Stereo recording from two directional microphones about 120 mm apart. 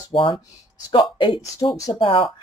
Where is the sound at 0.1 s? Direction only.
45° left (ahead or behind).